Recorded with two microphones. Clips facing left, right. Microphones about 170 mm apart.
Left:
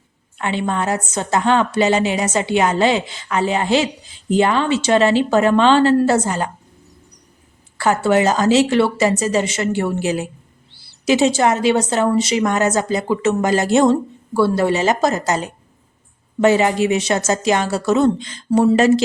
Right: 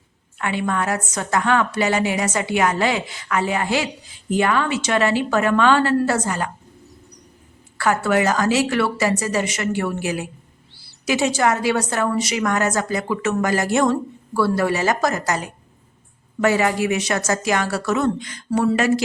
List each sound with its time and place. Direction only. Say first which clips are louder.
0.3 s a woman's voice: left 2 dB; 25° left (ahead or behind)
7.8 s a woman's voice: left 3 dB; 25° left (ahead or behind)